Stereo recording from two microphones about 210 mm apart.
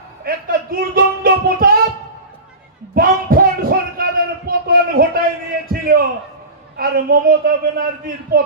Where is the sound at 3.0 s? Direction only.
45° right (ahead or behind).